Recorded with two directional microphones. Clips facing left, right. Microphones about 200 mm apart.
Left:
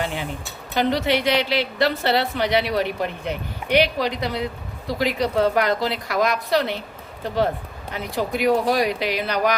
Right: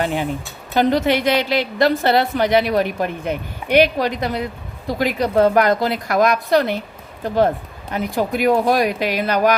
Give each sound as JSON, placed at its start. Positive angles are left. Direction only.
{"t": 0.0, "sound": "a woman's voice", "side_deg": -50}
{"t": 7.9, "sound": "a woman's voice", "side_deg": -50}